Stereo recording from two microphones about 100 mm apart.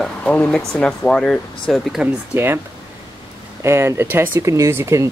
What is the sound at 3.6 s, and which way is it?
Speech, 25° right (ahead or behind).